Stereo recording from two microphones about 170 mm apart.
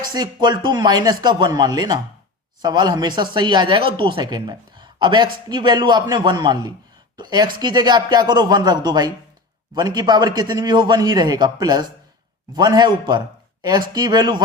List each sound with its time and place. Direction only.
0.0 s a man's voice: 25° right (ahead or behind)